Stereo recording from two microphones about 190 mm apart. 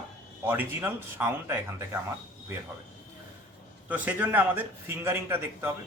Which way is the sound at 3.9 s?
10° right (ahead or behind).